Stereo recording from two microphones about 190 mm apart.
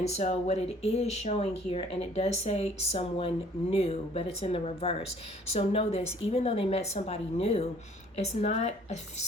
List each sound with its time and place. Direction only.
0.2 s speech: 35° left (ahead or behind)